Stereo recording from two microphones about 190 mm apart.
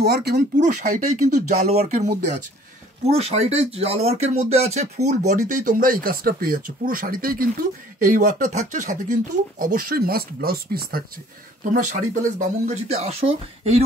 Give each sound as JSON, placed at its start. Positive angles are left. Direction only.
{"t": 0.0, "sound": "speech", "side_deg": -55}
{"t": 0.6, "sound": "speech", "side_deg": -40}